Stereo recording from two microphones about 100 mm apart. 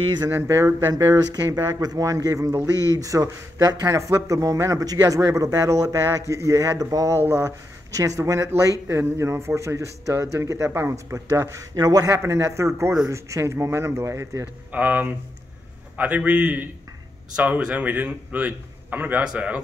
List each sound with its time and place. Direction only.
0.3 s speech: 25° right (ahead or behind)
1.1 s speech: 40° right (ahead or behind)
11.7 s speech: 40° right (ahead or behind)
14.4 s a man's voice: 15° right (ahead or behind)